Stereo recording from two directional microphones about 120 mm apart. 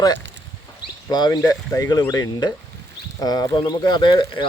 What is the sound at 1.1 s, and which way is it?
Speech, 35° left (ahead or behind).